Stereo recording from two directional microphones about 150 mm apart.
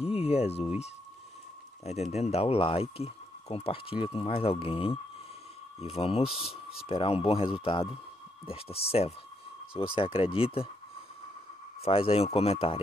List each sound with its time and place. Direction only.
0.0 s a sound: 40° left (ahead or behind)
2.1 s speech: 45° left (ahead or behind)
11.8 s speech: 40° left (ahead or behind)